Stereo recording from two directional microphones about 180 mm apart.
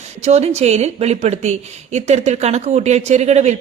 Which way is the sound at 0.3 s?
35° right (ahead or behind).